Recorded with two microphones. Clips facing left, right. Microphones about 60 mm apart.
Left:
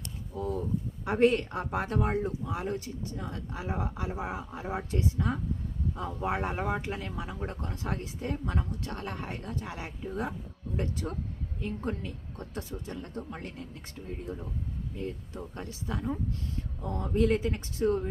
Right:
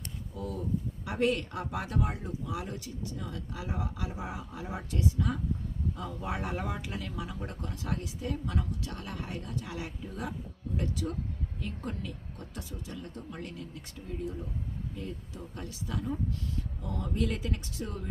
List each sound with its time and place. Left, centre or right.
0.3 s a sound: left
1.0 s speech: left
14.9 s speech: left